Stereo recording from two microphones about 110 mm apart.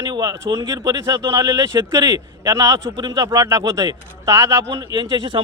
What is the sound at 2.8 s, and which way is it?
Speech, 45° right (ahead or behind).